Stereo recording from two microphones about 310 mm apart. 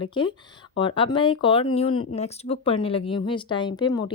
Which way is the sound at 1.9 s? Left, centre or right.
Left.